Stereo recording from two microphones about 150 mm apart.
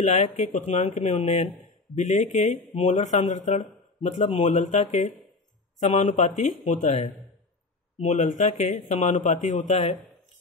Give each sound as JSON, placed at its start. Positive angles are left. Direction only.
{"t": 0.0, "sound": "speech", "side_deg": 50}